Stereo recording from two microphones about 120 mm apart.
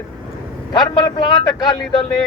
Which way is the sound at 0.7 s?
35° left (ahead or behind).